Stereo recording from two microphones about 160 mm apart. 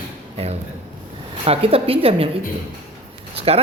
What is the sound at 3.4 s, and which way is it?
Speech, 40° right (ahead or behind).